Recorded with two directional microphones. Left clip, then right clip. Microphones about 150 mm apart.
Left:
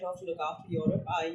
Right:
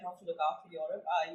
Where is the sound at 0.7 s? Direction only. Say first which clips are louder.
Left 5 dB; 65° left (ahead or behind).